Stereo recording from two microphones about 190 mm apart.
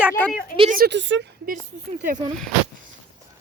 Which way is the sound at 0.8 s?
65° right (ahead or behind).